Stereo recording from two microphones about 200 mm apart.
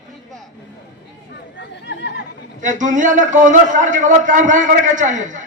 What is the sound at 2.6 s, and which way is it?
A man's voice, 40° right (ahead or behind).